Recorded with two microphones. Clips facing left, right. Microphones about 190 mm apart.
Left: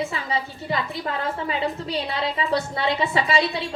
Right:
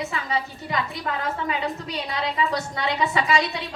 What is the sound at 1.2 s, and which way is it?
A woman's voice, 30° left (ahead or behind).